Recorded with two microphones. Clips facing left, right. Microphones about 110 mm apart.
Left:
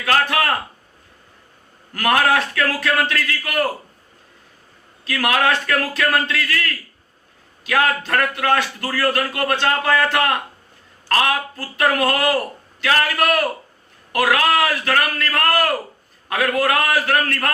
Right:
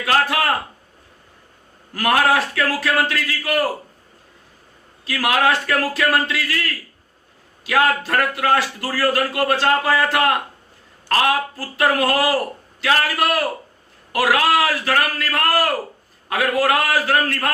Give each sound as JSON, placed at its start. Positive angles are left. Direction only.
{"t": 0.0, "sound": "speech", "side_deg": -15}
{"t": 2.0, "sound": "speech", "side_deg": -15}
{"t": 5.0, "sound": "speech", "side_deg": -15}
{"t": 7.7, "sound": "speech", "side_deg": -10}